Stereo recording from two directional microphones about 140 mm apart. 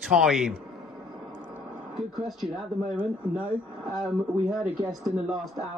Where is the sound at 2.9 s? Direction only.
10° right (ahead or behind).